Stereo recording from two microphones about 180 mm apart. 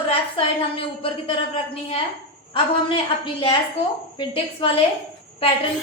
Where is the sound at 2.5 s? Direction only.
30° left (ahead or behind).